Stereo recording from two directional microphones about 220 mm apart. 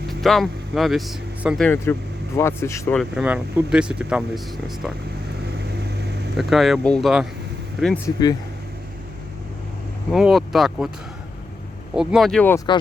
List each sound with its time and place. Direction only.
0.1 s speech: centre (ahead or behind)
3.0 s speech: 5° right (ahead or behind)
6.3 s speech: centre (ahead or behind)
8.0 s speech: 15° left (ahead or behind)
10.1 s speech: centre (ahead or behind)
11.9 s speech: centre (ahead or behind)